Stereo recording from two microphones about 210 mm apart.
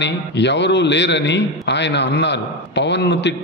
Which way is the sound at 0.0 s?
55° left (ahead or behind).